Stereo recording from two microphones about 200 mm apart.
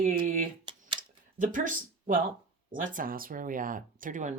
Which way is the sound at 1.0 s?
40° right (ahead or behind).